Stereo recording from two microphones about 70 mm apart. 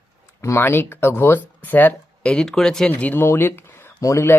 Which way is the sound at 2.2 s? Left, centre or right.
Centre.